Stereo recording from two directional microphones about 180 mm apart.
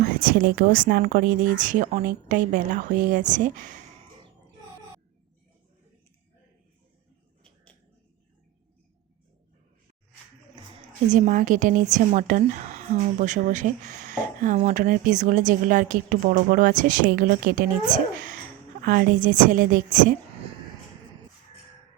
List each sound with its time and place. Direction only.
0.0 s a woman's voice: 50° right (ahead or behind)
11.1 s a woman's voice: 45° right (ahead or behind)